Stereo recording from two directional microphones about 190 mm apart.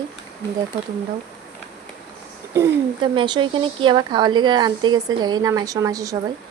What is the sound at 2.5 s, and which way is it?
A woman's voice, 15° right (ahead or behind).